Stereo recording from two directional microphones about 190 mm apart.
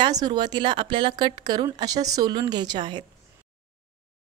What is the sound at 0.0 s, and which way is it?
Speech, 20° right (ahead or behind).